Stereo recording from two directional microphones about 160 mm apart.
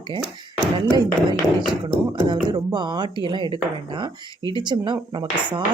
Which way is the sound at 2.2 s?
25° right (ahead or behind).